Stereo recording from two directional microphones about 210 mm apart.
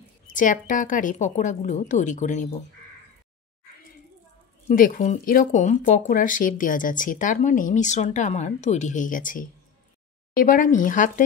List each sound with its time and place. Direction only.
0.3 s speech: 40° left (ahead or behind)
4.6 s speech: 40° left (ahead or behind)